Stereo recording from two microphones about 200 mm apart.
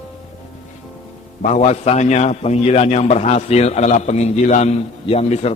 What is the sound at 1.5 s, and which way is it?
A man's voice, 35° left (ahead or behind).